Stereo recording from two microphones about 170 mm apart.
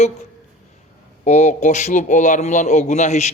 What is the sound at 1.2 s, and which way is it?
A man's voice, 40° left (ahead or behind).